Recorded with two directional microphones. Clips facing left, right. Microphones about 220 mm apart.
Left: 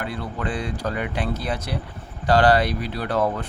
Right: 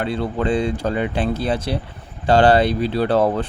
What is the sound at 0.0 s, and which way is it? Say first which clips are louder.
Speech: right 7 dB; 25° right (ahead or behind).